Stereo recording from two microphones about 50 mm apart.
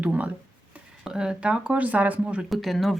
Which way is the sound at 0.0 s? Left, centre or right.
Right.